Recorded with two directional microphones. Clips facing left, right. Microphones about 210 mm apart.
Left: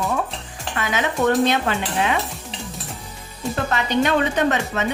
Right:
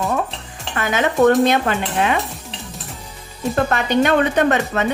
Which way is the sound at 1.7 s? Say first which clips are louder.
Right 2 dB; 55° right (ahead or behind).